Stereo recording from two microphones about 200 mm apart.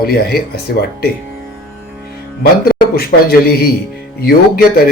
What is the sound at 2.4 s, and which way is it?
Speech, 50° left (ahead or behind).